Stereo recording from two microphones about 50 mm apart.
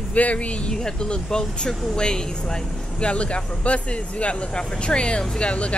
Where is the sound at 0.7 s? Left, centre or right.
Centre.